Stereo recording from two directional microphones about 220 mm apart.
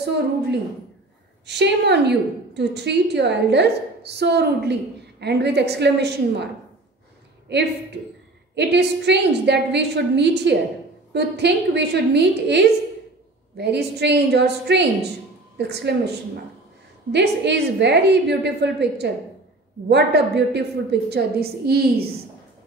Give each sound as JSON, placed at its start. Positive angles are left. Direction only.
{"t": 1.4, "sound": "a woman's voice", "side_deg": -50}